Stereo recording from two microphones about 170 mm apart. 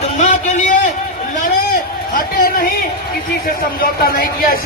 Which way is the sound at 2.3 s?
55° left (ahead or behind).